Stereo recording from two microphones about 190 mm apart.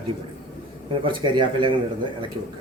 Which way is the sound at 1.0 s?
25° right (ahead or behind).